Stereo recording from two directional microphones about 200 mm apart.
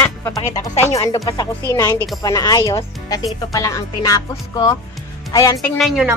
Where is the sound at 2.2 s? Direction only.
20° left (ahead or behind).